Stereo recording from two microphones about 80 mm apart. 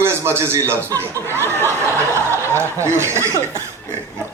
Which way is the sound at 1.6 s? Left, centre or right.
Right.